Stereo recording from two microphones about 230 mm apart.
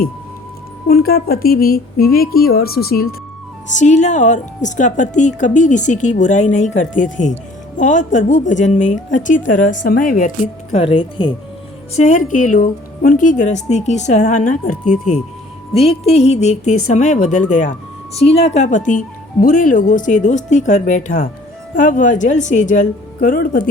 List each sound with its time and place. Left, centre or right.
0.9 s speech: left
3.8 s speech: left
15.7 s music: left
16.8 s speech: left